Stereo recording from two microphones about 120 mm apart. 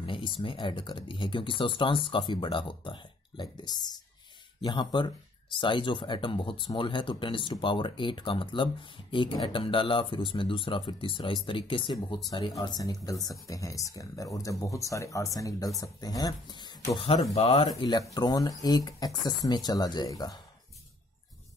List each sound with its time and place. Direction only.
0.0 s speech: 45° left (ahead or behind)
12.3 s speech: 35° left (ahead or behind)